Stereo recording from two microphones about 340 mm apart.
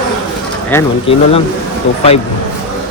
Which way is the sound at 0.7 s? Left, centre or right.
Centre.